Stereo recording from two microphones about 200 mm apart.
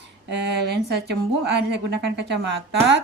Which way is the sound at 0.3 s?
55° right (ahead or behind).